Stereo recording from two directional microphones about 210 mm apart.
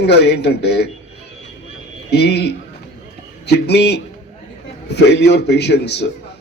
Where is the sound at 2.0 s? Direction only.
50° left (ahead or behind).